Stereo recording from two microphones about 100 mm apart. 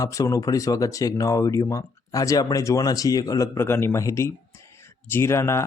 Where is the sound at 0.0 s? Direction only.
35° left (ahead or behind).